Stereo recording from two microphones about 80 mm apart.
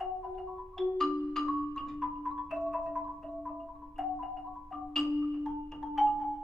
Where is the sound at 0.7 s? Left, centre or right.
Centre.